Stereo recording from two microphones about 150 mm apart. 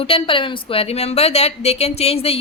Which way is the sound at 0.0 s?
35° left (ahead or behind).